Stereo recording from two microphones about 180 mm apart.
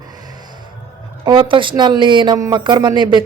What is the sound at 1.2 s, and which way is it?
Speech, 25° right (ahead or behind).